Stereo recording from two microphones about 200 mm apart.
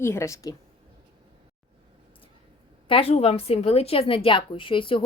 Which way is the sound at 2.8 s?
30° left (ahead or behind).